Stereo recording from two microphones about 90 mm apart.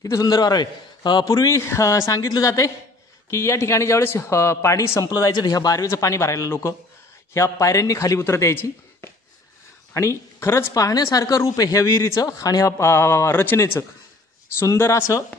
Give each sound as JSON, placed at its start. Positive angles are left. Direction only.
{"t": 0.0, "sound": "a man's voice", "side_deg": 45}
{"t": 1.3, "sound": "speech", "side_deg": 35}
{"t": 5.0, "sound": "speech", "side_deg": 45}